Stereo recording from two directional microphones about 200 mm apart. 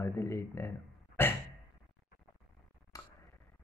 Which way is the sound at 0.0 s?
15° left (ahead or behind).